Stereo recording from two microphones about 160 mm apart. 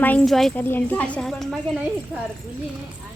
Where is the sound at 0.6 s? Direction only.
10° left (ahead or behind).